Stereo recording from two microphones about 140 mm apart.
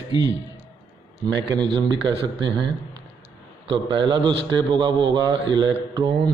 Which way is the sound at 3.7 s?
35° right (ahead or behind).